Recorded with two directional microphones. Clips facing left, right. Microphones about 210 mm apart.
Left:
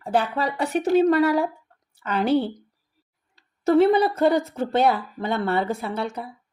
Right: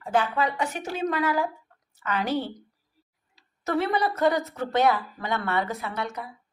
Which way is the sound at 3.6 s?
30° left (ahead or behind).